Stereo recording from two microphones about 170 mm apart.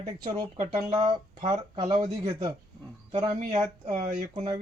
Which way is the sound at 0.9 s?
45° right (ahead or behind).